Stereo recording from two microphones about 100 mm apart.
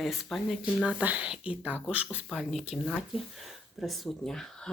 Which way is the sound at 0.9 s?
15° right (ahead or behind).